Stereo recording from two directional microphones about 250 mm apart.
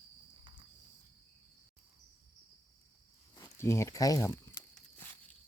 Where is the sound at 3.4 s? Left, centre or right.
Centre.